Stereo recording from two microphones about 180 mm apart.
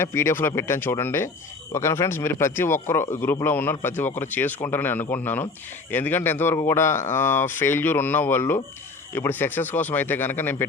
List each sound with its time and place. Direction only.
0.0 s speech: 15° left (ahead or behind)